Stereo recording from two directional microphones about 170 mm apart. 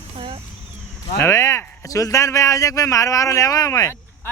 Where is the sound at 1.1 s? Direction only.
15° left (ahead or behind).